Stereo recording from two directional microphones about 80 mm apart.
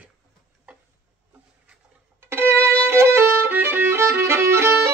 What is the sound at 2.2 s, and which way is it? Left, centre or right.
Violin, right.